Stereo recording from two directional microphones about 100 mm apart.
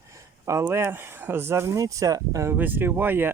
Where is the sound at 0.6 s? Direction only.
25° right (ahead or behind).